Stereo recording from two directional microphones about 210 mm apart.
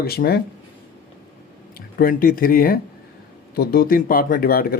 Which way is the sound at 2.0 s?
40° left (ahead or behind).